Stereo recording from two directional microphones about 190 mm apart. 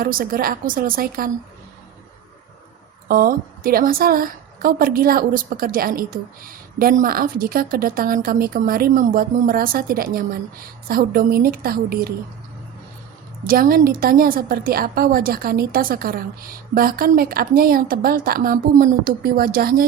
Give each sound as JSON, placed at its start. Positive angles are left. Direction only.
{"t": 0.0, "sound": "a woman's voice", "side_deg": -50}
{"t": 3.1, "sound": "a woman's voice", "side_deg": -50}
{"t": 13.5, "sound": "a woman's voice", "side_deg": -50}